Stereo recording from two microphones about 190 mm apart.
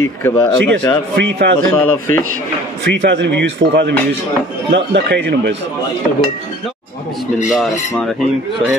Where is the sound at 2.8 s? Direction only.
70° right (ahead or behind).